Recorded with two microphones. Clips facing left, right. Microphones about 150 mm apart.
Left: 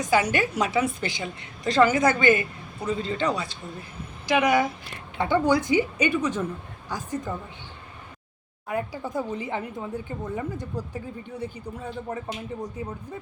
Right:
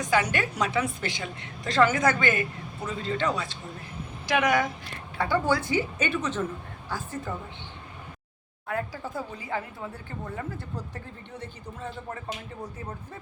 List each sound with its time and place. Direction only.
0.0 s a woman's voice: 5° left (ahead or behind)
5.1 s speech: 20° left (ahead or behind)
8.6 s speech: 15° left (ahead or behind)